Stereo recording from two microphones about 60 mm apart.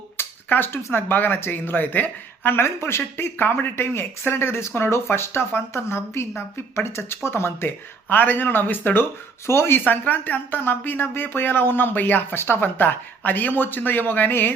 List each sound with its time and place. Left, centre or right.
0.2 s a sound: left
0.8 s speech: left
1.0 s speech: left
8.1 s speech: left
9.5 s speech: left
9.8 s speech: left